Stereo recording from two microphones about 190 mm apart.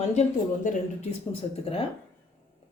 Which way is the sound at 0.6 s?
35° left (ahead or behind).